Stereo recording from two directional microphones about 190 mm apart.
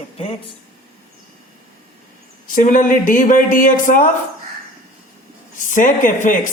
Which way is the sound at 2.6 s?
45° left (ahead or behind).